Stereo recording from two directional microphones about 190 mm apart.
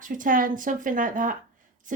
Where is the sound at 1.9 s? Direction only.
45° right (ahead or behind).